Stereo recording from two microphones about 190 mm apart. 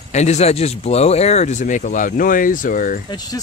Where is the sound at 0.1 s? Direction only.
35° left (ahead or behind).